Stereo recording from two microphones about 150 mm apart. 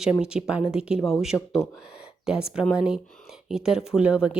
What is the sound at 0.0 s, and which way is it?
Speech, 5° right (ahead or behind).